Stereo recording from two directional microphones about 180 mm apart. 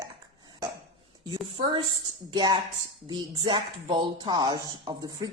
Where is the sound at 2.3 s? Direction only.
25° right (ahead or behind).